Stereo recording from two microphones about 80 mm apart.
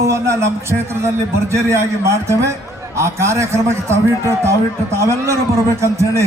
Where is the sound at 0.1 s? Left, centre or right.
Right.